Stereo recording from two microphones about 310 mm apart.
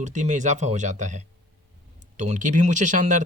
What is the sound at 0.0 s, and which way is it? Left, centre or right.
Speech, right.